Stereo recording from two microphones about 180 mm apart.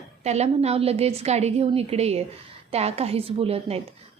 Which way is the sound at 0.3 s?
35° right (ahead or behind).